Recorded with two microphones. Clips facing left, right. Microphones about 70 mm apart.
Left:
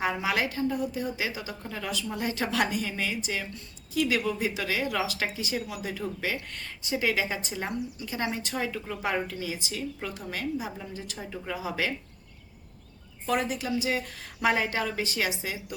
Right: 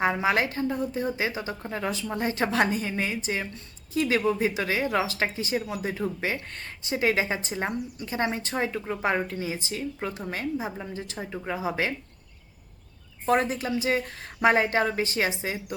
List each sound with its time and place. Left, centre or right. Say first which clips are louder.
0.0 s a woman's voice: right 4 dB; right
13.2 s a woman's voice: right 4 dB; right